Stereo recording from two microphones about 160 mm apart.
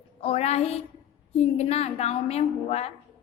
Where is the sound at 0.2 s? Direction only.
40° left (ahead or behind).